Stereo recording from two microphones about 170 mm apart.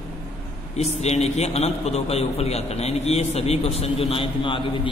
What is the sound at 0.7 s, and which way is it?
A man's voice, 40° left (ahead or behind).